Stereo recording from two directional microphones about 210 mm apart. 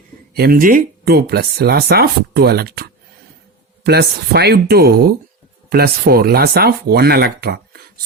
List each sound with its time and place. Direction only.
0.3 s speech: 45° right (ahead or behind)
3.8 s speech: 50° right (ahead or behind)